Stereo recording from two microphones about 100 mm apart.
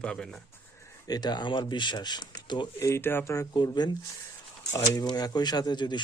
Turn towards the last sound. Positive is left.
turn(degrees=45)  # may be behind; listen again after turning